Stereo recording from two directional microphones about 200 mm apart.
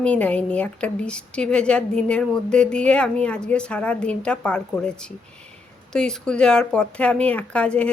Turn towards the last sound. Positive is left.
turn(degrees=5)  # may be behind; listen again after turning